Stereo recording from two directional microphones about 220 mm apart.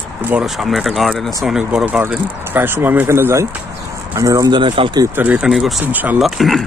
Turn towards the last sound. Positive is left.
turn(degrees=0)  # may be behind; listen again after turning